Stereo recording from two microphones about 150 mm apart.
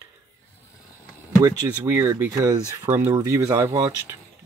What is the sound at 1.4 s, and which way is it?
Speech, 20° right (ahead or behind).